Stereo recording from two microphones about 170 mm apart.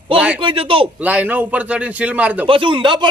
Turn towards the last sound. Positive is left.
turn(degrees=-30)  # may be behind; listen again after turning